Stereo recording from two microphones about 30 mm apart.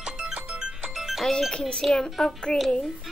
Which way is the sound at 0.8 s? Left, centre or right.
Centre.